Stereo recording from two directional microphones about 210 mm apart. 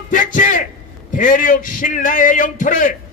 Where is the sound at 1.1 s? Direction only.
40° left (ahead or behind).